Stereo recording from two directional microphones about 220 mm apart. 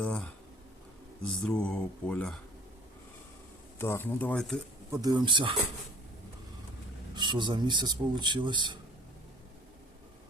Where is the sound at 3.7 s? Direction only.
10° left (ahead or behind).